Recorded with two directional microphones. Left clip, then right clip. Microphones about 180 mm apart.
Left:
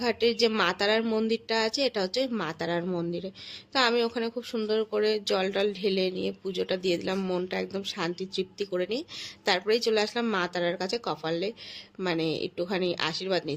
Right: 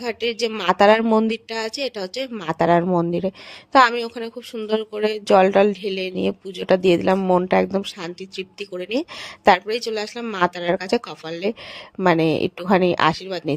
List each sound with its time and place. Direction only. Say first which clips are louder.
0.0 s speech: right 1 dB; 50° right (ahead or behind)
1.0 s speech: right 10 dB; 30° right (ahead or behind)
1.3 s speech: right 1 dB; 50° right (ahead or behind)
4.8 s speech: even; centre (ahead or behind)
5.1 s speech: right 12 dB; 45° right (ahead or behind)
7.2 s speech: right 13 dB; 35° right (ahead or behind)
8.9 s speech: right 8 dB; 50° right (ahead or behind)
9.8 s speech: even; centre (ahead or behind)
10.4 s speech: right 8 dB; 55° right (ahead or behind)